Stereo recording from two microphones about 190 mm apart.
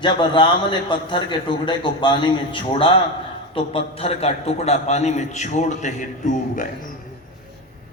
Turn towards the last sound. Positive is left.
turn(degrees=45)  # may be behind; listen again after turning